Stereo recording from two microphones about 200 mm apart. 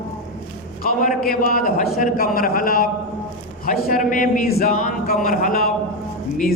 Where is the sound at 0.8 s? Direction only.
45° left (ahead or behind).